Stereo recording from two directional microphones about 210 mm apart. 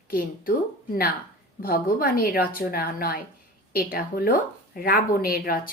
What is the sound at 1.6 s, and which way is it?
A woman's voice, 45° left (ahead or behind).